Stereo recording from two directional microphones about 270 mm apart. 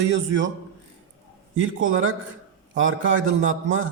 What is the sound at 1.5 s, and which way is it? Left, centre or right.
Speech, right.